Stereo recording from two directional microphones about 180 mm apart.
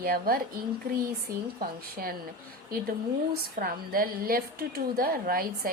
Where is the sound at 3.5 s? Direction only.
55° right (ahead or behind).